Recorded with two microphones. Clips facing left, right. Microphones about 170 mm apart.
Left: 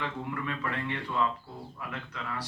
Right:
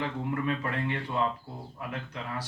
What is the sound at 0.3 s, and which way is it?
Speech, 40° right (ahead or behind).